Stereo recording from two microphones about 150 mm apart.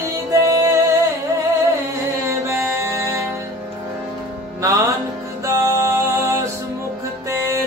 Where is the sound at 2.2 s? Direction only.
20° right (ahead or behind).